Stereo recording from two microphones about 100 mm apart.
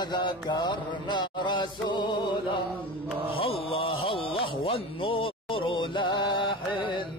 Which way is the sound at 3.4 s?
70° left (ahead or behind).